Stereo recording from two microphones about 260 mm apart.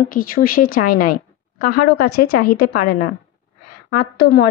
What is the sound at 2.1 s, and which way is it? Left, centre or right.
Speech, left.